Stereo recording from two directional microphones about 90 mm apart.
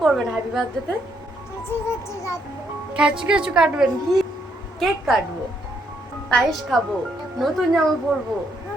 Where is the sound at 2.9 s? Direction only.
10° right (ahead or behind).